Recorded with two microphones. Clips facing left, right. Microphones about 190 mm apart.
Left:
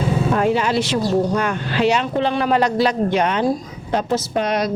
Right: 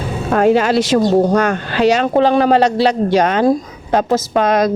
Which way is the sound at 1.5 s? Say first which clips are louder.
Right 4 dB; 45° right (ahead or behind).